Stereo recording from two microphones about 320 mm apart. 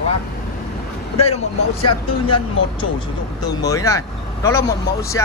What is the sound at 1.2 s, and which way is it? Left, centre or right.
Speech, centre.